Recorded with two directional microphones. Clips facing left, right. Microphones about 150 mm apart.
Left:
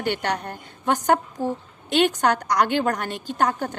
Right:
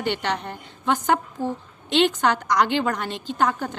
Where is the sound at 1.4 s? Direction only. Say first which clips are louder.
Left 1 dB; 15° left (ahead or behind).